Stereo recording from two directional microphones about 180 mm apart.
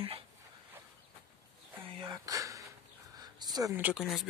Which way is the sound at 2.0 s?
20° right (ahead or behind).